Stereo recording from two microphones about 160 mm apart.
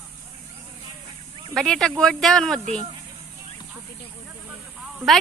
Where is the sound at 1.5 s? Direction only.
5° left (ahead or behind).